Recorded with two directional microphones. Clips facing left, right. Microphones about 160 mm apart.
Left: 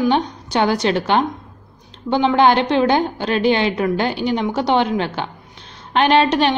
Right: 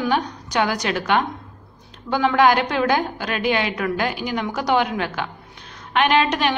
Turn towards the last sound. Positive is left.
turn(degrees=30)  # may be behind; listen again after turning